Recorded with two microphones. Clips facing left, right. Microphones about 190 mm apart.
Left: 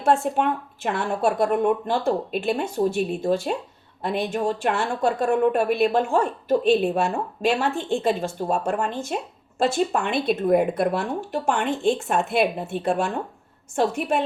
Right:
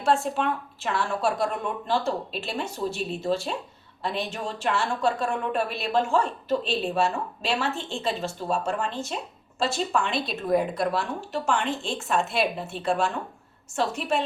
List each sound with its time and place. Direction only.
0.1 s speech: 55° left (ahead or behind)
0.4 s a woman's voice: 15° left (ahead or behind)
1.2 s a woman's voice: 55° left (ahead or behind)